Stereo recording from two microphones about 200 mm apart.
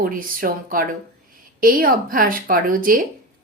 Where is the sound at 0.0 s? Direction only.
45° right (ahead or behind).